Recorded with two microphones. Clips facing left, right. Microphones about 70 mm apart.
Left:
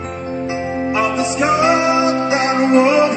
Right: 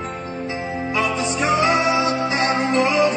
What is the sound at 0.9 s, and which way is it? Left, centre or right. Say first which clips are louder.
Music: left 3 dB; centre.